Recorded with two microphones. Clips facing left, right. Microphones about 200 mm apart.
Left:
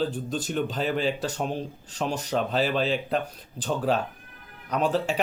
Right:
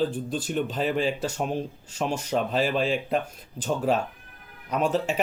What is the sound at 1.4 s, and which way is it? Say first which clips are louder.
Speech: right 1 dB; 5° right (ahead or behind).